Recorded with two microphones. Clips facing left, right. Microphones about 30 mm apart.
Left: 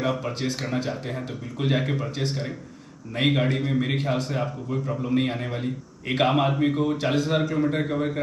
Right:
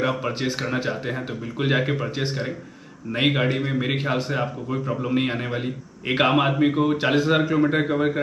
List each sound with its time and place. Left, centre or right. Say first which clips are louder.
0.0 s a man's voice: right 2 dB; right